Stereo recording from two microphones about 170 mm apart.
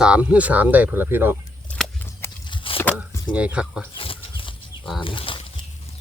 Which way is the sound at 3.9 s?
35° left (ahead or behind).